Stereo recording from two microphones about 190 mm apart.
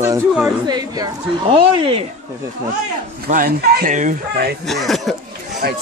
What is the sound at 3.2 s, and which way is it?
Speech, 50° right (ahead or behind).